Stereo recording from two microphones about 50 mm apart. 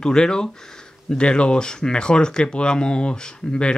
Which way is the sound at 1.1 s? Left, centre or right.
Centre.